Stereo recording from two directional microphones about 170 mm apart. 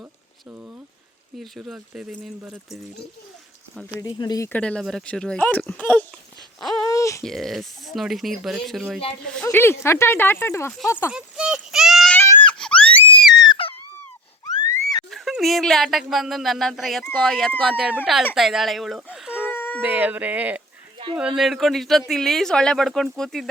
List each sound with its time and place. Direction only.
1.4 s speech: centre (ahead or behind)
4.0 s speech: 25° left (ahead or behind)
4.4 s speech: 10° left (ahead or behind)
6.8 s a sound: 20° left (ahead or behind)
7.2 s speech: centre (ahead or behind)
9.3 s speech: 10° left (ahead or behind)
11.1 s a sound: 5° right (ahead or behind)
12.1 s crying: 15° left (ahead or behind)
13.4 s a sound: 30° left (ahead or behind)
15.1 s speech: centre (ahead or behind)
19.5 s howl: 10° left (ahead or behind)
19.8 s speech: 10° right (ahead or behind)